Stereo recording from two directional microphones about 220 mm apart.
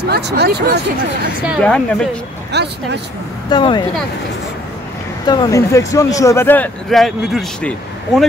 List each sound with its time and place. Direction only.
0.0 s speech: 45° right (ahead or behind)
1.4 s a woman's voice: centre (ahead or behind)
2.5 s speech: 50° right (ahead or behind)
3.4 s speech: 20° left (ahead or behind)
5.2 s speech: 20° left (ahead or behind); by 7.7 s centre (ahead or behind)